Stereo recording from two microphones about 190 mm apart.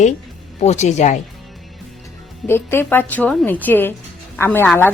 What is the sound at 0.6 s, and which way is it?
Speech, 35° left (ahead or behind).